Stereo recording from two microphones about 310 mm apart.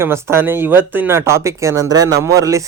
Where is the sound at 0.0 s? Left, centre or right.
Centre.